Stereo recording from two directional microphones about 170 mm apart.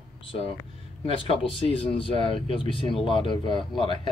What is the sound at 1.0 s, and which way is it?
Speech, 35° left (ahead or behind).